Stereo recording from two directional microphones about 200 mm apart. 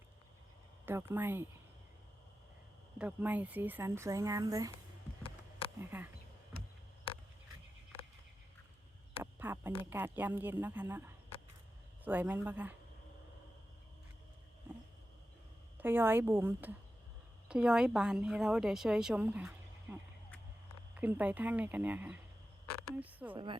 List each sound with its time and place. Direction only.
0.9 s speech: 10° right (ahead or behind)
3.0 s speech: 10° right (ahead or behind)
5.2 s a sound: 25° left (ahead or behind)
5.8 s speech: 10° right (ahead or behind)
9.2 s a sound: 10° right (ahead or behind)
9.9 s speech: 10° right (ahead or behind)
15.8 s a woman's voice: 10° right (ahead or behind)
23.3 s speech: 25° right (ahead or behind)